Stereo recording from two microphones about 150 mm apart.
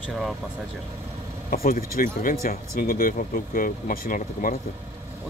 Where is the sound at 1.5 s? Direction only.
75° left (ahead or behind).